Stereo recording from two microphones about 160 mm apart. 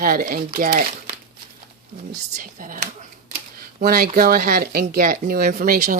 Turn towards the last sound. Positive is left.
turn(degrees=-60)  # may be behind; listen again after turning